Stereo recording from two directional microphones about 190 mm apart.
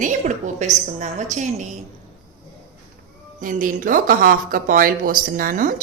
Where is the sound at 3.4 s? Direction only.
45° right (ahead or behind).